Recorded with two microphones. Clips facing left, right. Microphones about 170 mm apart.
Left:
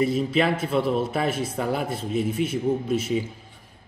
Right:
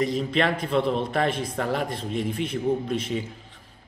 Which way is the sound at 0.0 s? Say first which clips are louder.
Left 2 dB; 5° left (ahead or behind).